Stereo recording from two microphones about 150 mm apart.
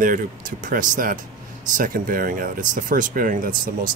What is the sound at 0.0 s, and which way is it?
Speech, 65° right (ahead or behind).